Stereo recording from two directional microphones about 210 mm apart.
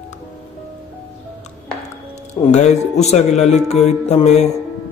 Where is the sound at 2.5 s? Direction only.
30° left (ahead or behind).